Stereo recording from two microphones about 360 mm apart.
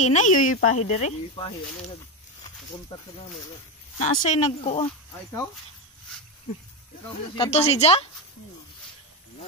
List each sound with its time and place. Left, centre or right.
0.0 s speech: centre
2.9 s speech: centre
7.3 s speech: centre